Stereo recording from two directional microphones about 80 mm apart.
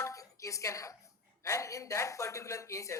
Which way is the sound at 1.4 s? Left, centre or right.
Left.